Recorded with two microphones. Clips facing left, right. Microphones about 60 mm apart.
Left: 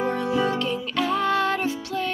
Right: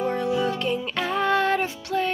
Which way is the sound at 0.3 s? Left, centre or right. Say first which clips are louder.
Left 2 dB; left.